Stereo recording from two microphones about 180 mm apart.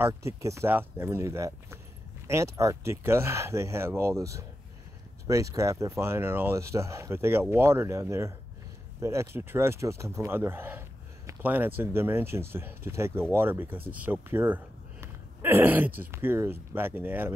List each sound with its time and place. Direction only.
0.0 s speech: 15° right (ahead or behind)